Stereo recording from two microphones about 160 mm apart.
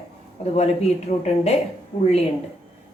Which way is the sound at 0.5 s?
40° left (ahead or behind).